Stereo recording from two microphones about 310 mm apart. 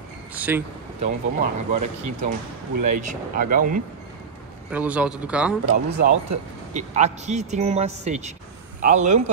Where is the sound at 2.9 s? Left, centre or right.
Right.